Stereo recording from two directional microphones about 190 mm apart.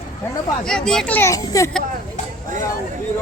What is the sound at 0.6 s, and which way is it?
Speech, 5° left (ahead or behind).